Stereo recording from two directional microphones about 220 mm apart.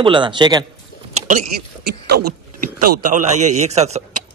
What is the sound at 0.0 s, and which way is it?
Speech, 20° right (ahead or behind).